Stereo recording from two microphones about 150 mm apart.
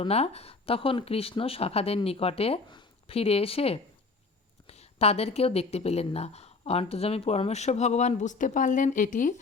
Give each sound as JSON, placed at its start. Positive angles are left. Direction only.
{"t": 0.0, "sound": "speech", "side_deg": 45}